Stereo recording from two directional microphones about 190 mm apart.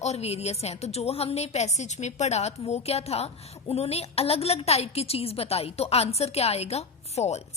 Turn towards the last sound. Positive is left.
turn(degrees=35)  # may be behind; listen again after turning